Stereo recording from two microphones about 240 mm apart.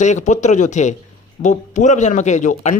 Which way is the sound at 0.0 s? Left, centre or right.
Left.